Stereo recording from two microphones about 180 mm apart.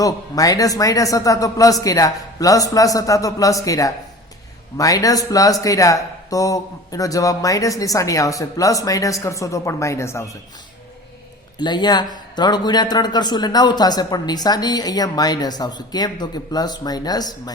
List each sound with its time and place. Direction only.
0.0 s speech: 20° left (ahead or behind)
11.5 s speech: 25° left (ahead or behind)